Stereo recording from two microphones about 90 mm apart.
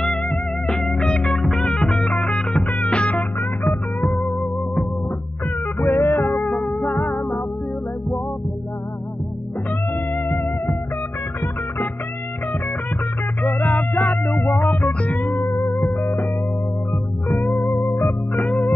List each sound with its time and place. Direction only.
0.0 s music: 5° left (ahead or behind)
5.8 s music: 25° left (ahead or behind)
10.1 s music: 20° left (ahead or behind)
13.4 s music: 20° left (ahead or behind)
14.5 s music: 5° left (ahead or behind)
14.8 s music: 15° left (ahead or behind)
17.3 s music: 15° left (ahead or behind)
17.6 s music: 25° left (ahead or behind)